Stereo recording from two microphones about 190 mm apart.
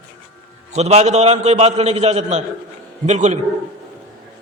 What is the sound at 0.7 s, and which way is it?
A man's voice, 35° right (ahead or behind).